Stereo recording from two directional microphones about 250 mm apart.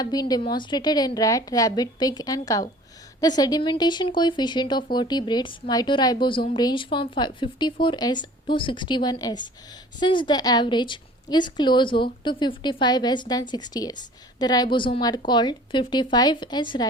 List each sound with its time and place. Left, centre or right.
0.0 s speech: centre